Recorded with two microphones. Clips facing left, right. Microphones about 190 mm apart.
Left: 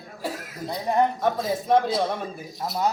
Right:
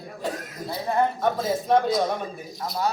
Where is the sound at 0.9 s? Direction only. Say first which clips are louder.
Left 2 dB; 20° left (ahead or behind).